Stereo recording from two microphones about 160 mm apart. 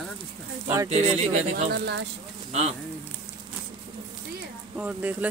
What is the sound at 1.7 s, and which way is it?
Speech, 90° right.